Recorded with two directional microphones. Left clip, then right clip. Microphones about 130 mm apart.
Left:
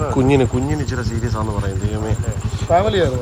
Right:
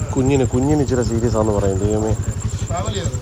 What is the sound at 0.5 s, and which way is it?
Speech, 30° right (ahead or behind).